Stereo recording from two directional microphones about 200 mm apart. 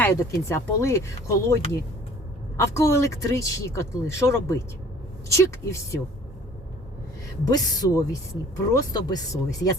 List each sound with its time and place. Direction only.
0.0 s speech: 15° left (ahead or behind)
2.6 s speech: 15° left (ahead or behind)
7.4 s speech: 20° left (ahead or behind)